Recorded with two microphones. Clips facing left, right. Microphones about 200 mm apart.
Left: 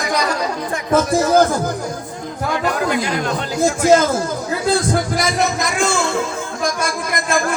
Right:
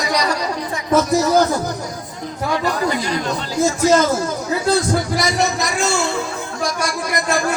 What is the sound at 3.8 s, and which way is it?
Speech, 55° left (ahead or behind).